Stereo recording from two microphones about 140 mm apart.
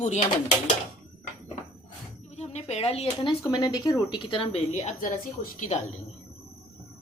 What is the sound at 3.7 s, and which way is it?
Speech, 30° left (ahead or behind).